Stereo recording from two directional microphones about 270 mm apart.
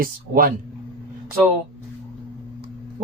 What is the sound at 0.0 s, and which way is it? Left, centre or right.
Speech, right.